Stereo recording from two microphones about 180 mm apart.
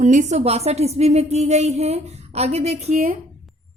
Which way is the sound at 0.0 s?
40° right (ahead or behind).